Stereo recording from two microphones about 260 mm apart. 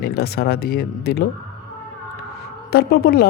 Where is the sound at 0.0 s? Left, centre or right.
Left.